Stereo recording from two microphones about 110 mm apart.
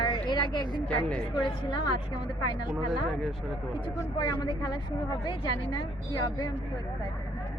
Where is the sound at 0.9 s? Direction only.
10° left (ahead or behind).